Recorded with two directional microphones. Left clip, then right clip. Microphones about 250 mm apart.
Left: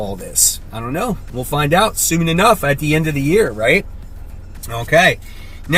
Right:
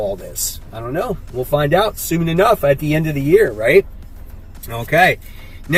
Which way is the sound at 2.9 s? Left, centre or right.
Centre.